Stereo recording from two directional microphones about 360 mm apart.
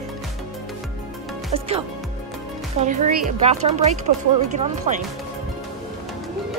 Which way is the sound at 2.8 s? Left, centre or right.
Centre.